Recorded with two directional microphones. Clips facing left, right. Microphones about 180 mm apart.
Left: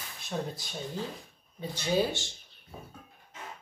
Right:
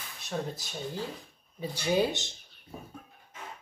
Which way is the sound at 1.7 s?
15° right (ahead or behind).